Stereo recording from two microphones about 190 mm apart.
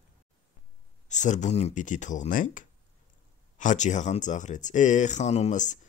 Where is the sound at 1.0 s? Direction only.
40° left (ahead or behind).